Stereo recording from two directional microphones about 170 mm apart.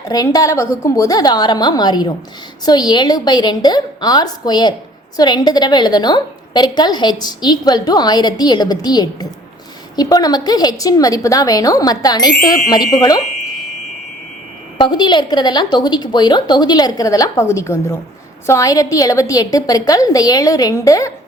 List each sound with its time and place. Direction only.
0.1 s a woman's voice: 20° left (ahead or behind)
14.8 s a woman's voice: 25° left (ahead or behind)